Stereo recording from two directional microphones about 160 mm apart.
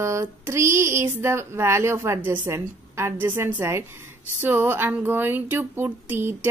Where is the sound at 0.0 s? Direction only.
15° right (ahead or behind).